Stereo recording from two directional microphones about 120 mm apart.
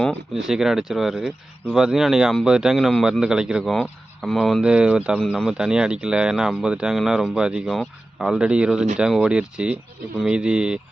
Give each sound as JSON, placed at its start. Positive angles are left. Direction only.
{"t": 0.4, "sound": "a man's voice", "side_deg": -5}